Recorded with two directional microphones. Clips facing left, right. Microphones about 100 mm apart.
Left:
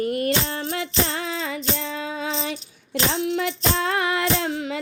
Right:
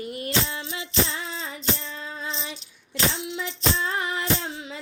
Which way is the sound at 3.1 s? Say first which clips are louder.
Left 8 dB; 60° left (ahead or behind).